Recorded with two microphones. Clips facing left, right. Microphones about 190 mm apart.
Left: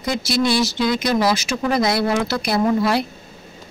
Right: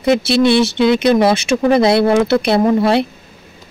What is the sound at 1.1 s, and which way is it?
Speech, 25° right (ahead or behind).